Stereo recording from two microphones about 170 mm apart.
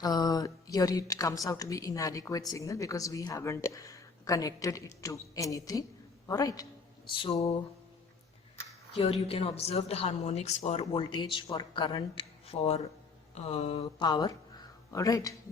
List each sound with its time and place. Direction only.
0.0 s a woman's voice: 25° left (ahead or behind)
7.1 s a woman's voice: 35° left (ahead or behind)
8.9 s a woman's voice: 35° left (ahead or behind)
12.5 s a woman's voice: 40° left (ahead or behind)
14.1 s a woman's voice: 25° left (ahead or behind)